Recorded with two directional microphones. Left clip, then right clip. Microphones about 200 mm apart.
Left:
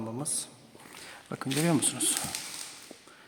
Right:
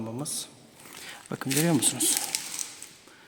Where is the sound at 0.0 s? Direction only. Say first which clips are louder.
Right 1 dB; 5° right (ahead or behind).